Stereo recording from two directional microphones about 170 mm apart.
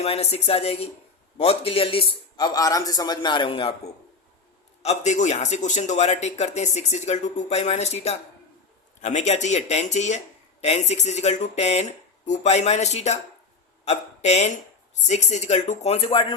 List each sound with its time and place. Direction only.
0.0 s a man's voice: 35° left (ahead or behind)
4.8 s a man's voice: 40° left (ahead or behind)